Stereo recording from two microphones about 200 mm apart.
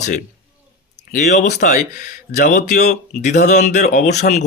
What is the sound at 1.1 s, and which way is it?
Speech, 35° left (ahead or behind).